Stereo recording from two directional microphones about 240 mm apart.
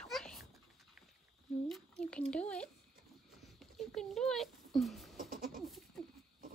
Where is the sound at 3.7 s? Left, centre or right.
Centre.